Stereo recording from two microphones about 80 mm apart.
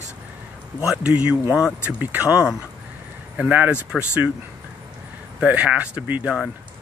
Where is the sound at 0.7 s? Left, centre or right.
Centre.